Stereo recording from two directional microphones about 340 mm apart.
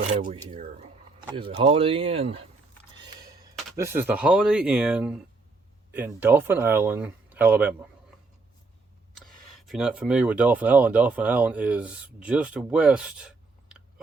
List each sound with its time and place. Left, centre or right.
0.1 s speech: right
3.5 s speech: centre
9.1 s speech: centre